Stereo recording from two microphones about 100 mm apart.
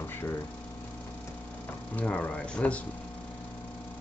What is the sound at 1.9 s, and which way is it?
Speech, 15° left (ahead or behind).